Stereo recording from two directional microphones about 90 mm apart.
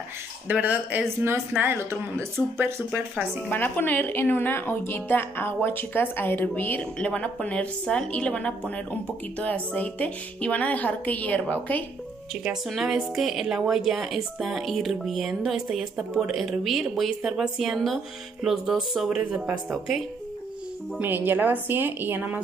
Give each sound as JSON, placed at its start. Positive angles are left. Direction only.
{"t": 0.5, "sound": "speech", "side_deg": -15}
{"t": 3.4, "sound": "a woman's voice", "side_deg": 20}
{"t": 12.6, "sound": "speech", "side_deg": 0}
{"t": 21.0, "sound": "speech", "side_deg": -20}